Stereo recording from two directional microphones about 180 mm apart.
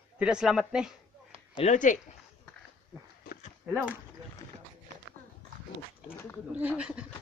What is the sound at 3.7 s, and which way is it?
Speech, 10° right (ahead or behind).